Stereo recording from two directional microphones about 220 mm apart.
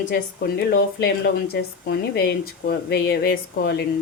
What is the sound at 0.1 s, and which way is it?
Speech, 45° left (ahead or behind).